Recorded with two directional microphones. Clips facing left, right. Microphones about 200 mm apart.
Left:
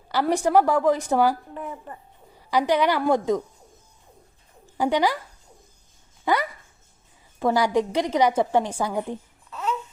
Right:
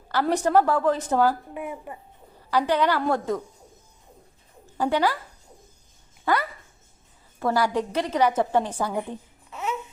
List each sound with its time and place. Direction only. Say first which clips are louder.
0.1 s a woman's voice: left 1 dB; 15° left (ahead or behind)
1.5 s speech: right 1 dB; 10° right (ahead or behind)
2.5 s a woman's voice: left 1 dB; 15° left (ahead or behind)
4.8 s a woman's voice: left 1 dB; 15° left (ahead or behind)
6.2 s a sound: left 1 dB; 15° left (ahead or behind)
7.3 s a woman's voice: left 3 dB; 15° left (ahead or behind)
9.5 s babbling: left 2 dB; 10° right (ahead or behind)